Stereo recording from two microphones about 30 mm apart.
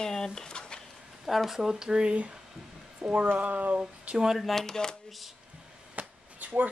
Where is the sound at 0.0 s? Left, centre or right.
Left.